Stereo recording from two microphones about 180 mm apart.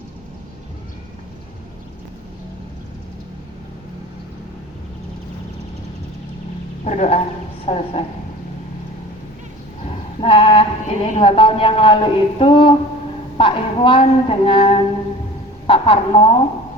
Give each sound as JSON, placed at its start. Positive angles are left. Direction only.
{"t": 6.8, "sound": "a woman's voice", "side_deg": 40}
{"t": 10.2, "sound": "speech", "side_deg": 30}